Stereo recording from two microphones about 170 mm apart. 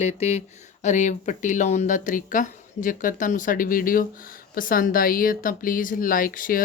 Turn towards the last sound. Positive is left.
turn(degrees=55)  # may be behind; listen again after turning